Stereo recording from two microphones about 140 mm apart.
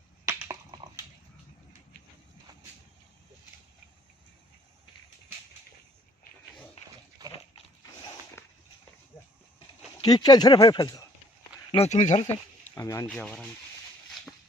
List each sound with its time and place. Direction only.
0.3 s a sound: 25° right (ahead or behind)
7.2 s dog: 30° right (ahead or behind)
10.0 s speech: 30° left (ahead or behind)
11.7 s speech: 50° left (ahead or behind)
12.7 s speech: 20° left (ahead or behind)
13.1 s speech: 10° left (ahead or behind)